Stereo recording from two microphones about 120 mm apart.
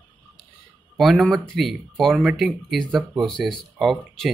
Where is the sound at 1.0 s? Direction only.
Centre (ahead or behind).